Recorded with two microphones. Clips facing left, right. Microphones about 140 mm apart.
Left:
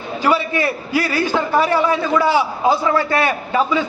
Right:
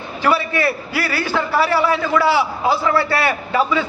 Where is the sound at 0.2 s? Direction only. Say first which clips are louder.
Even; 15° left (ahead or behind).